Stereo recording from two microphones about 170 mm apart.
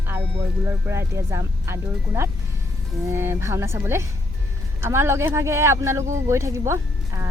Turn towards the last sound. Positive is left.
turn(degrees=-15)  # may be behind; listen again after turning